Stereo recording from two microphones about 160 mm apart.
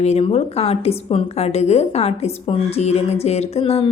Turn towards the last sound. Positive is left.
turn(degrees=35)  # may be behind; listen again after turning